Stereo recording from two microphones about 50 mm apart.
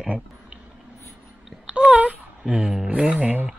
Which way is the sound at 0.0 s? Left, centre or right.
Right.